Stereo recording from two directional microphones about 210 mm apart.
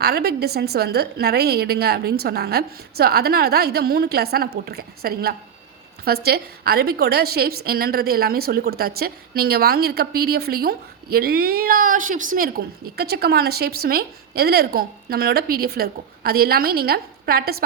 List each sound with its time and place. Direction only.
0.0 s a woman's voice: 50° right (ahead or behind)